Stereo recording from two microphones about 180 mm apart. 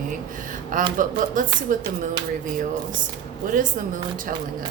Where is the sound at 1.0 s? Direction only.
50° right (ahead or behind).